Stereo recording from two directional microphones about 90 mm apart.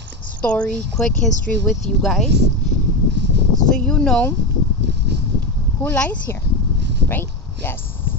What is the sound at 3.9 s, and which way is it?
Speech, 10° left (ahead or behind).